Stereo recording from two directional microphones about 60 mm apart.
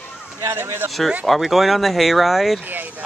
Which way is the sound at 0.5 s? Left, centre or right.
Right.